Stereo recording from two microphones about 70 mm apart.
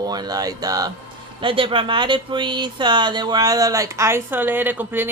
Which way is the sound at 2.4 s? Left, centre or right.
Right.